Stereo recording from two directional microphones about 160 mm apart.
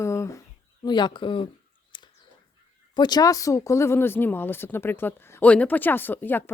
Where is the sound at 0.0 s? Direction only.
20° left (ahead or behind).